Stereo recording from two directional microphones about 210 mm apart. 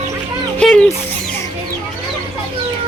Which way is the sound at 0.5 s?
5° left (ahead or behind).